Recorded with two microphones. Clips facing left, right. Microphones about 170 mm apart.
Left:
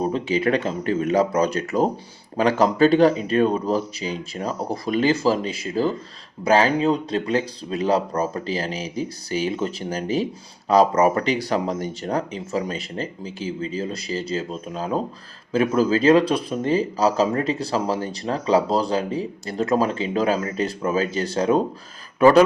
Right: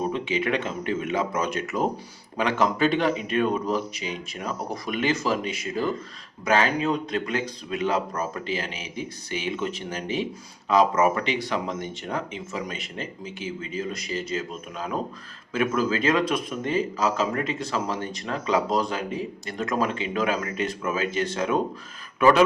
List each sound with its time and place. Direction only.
0.0 s speech: 35° left (ahead or behind)